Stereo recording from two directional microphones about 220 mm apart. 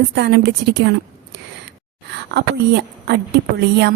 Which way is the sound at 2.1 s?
50° right (ahead or behind).